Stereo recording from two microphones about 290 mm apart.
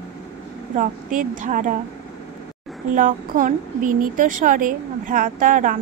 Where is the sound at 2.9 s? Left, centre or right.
Right.